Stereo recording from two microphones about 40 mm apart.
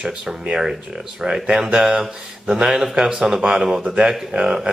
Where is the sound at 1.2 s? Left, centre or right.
Right.